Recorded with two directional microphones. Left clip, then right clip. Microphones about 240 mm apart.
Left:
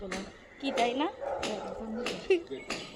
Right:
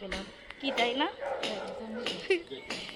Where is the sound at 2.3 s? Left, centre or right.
Centre.